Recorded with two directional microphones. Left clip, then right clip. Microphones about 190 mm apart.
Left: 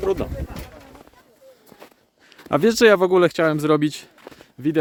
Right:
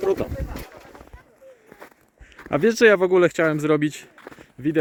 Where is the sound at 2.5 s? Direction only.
20° left (ahead or behind).